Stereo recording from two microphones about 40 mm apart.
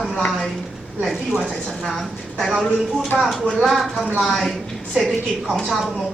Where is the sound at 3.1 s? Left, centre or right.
Centre.